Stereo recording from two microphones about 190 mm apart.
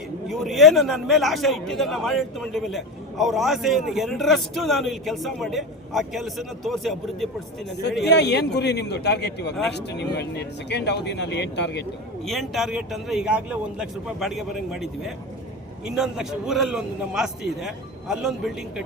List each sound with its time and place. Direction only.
0.3 s a man's voice: centre (ahead or behind)
8.0 s speech: 65° left (ahead or behind)
12.2 s a man's voice: centre (ahead or behind)